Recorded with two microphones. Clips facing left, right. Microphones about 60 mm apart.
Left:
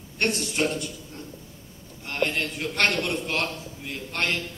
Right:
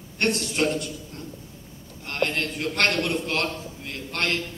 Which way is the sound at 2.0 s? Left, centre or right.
Centre.